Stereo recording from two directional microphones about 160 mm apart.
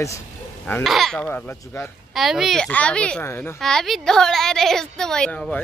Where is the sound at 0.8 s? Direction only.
Centre (ahead or behind).